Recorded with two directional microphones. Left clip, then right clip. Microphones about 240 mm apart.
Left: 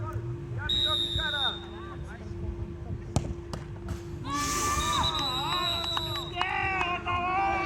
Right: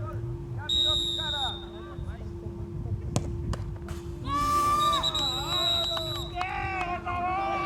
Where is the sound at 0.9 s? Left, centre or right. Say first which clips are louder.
Right 1 dB; right.